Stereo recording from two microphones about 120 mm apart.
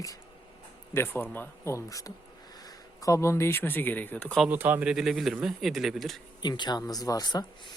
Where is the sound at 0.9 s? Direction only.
20° left (ahead or behind).